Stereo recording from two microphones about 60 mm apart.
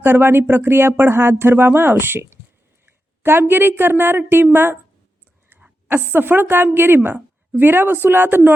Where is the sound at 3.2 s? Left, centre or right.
Right.